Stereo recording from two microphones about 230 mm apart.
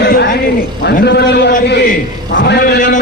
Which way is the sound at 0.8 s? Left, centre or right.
Left.